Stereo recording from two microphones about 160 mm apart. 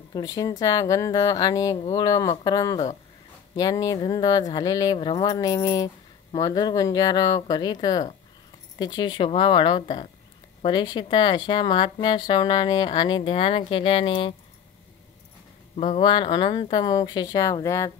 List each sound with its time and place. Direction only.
0.1 s a woman's voice: 25° left (ahead or behind)
15.7 s a woman's voice: 35° left (ahead or behind); by 17.9 s 20° left (ahead or behind)